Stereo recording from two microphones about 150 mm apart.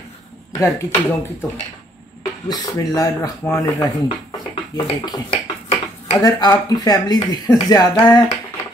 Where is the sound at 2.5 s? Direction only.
25° left (ahead or behind).